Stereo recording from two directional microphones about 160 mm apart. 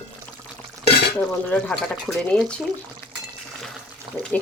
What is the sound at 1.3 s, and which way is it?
Speech, 10° left (ahead or behind).